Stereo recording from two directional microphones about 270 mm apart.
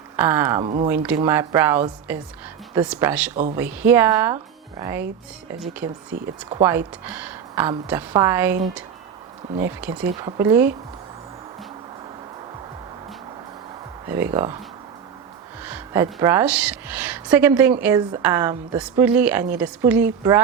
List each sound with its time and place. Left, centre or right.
0.2 s speech: centre
0.6 s speech: right
1.0 s speech: centre
9.6 s speech: centre
14.1 s speech: centre
15.6 s speech: centre